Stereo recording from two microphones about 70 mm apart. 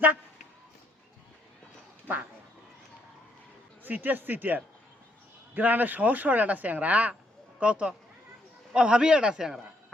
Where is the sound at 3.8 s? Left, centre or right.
Right.